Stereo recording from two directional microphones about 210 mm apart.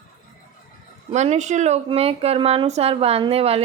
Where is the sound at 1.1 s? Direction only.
30° right (ahead or behind).